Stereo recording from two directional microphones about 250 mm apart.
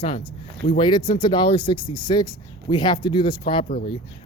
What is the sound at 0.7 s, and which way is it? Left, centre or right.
Speech, centre.